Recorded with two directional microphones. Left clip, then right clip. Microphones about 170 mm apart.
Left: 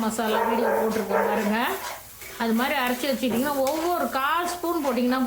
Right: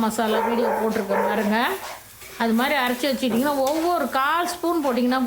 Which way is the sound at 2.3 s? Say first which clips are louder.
Right 3 dB; 25° right (ahead or behind).